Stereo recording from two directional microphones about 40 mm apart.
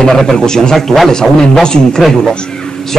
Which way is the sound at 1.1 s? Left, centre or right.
Centre.